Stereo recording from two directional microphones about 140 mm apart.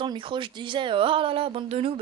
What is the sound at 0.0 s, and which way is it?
Speech, 35° right (ahead or behind).